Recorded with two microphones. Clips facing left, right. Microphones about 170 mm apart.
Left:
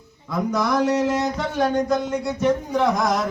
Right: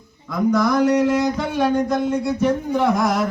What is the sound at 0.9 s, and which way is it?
Music, 25° left (ahead or behind).